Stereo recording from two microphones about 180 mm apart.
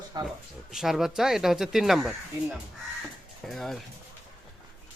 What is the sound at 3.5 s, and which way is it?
Speech, centre (ahead or behind).